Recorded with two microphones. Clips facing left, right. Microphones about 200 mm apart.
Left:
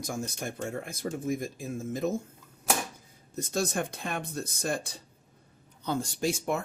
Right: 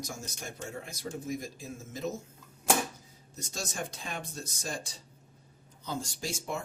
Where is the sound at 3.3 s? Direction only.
55° left (ahead or behind).